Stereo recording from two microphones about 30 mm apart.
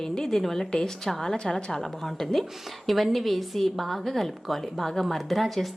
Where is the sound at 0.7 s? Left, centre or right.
Left.